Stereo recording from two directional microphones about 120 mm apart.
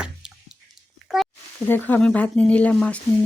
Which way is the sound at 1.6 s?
15° left (ahead or behind).